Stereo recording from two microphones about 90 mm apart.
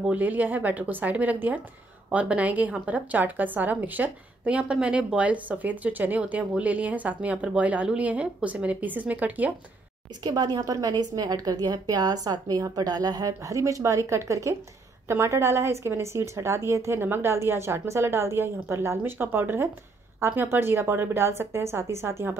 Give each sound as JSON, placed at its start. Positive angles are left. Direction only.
{"t": 0.0, "sound": "a woman's voice", "side_deg": -20}
{"t": 10.2, "sound": "a woman's voice", "side_deg": -50}